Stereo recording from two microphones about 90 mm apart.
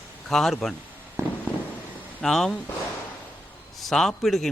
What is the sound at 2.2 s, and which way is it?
Speech, 5° left (ahead or behind).